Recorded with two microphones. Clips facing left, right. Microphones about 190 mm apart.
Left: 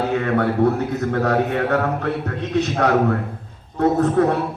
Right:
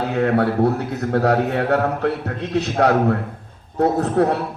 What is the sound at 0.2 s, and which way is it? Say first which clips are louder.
A man's voice: right 5 dB; 35° right (ahead or behind).